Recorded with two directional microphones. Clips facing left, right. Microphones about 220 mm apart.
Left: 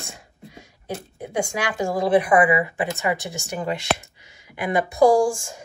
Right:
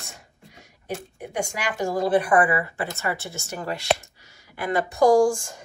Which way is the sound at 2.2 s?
10° left (ahead or behind).